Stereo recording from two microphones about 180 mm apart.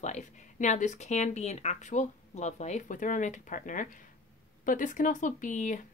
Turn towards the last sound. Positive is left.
turn(degrees=45)  # may be behind; listen again after turning